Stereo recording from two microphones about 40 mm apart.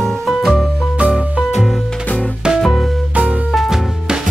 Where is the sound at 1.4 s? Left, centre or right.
Right.